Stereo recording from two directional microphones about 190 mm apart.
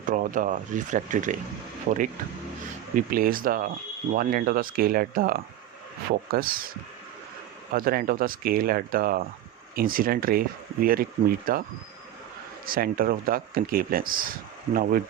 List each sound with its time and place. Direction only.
0.0 s speech: 45° right (ahead or behind)
7.7 s speech: 50° right (ahead or behind)
12.6 s speech: 50° right (ahead or behind)